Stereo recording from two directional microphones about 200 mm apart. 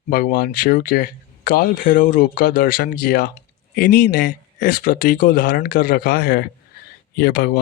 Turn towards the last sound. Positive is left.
turn(degrees=50)  # may be behind; listen again after turning